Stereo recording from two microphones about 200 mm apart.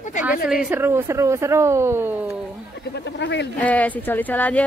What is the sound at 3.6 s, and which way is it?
Speech, 10° left (ahead or behind).